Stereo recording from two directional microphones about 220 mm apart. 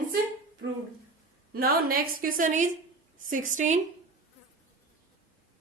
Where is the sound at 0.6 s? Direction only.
55° right (ahead or behind).